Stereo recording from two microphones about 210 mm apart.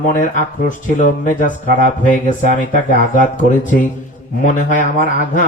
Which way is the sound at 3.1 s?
40° left (ahead or behind).